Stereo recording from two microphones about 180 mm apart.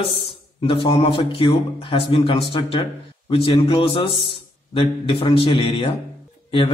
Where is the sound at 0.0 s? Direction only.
30° left (ahead or behind).